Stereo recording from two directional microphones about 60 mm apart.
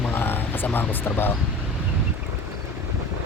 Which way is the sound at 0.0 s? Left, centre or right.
Left.